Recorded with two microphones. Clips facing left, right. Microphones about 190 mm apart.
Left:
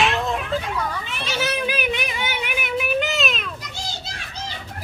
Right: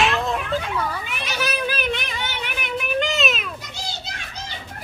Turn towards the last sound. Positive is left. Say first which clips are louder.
# right 1 dB
turn(degrees=0)  # may be behind; listen again after turning